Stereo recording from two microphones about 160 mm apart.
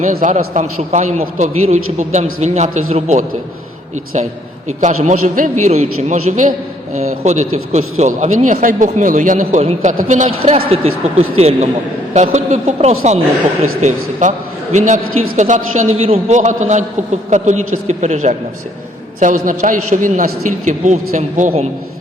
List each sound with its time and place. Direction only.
0.0 s a man's voice: 50° right (ahead or behind)
4.8 s a man's voice: 50° right (ahead or behind)
5.7 s a man's voice: 40° right (ahead or behind)